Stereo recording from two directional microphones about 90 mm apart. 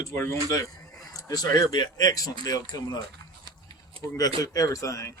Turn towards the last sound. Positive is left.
turn(degrees=35)  # may be behind; listen again after turning